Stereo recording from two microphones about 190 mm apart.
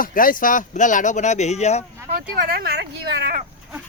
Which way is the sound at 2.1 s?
50° right (ahead or behind).